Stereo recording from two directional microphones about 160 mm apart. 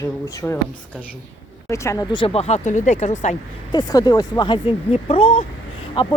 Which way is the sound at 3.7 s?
25° left (ahead or behind).